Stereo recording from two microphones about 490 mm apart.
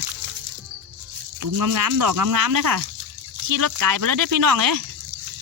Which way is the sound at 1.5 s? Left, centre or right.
Right.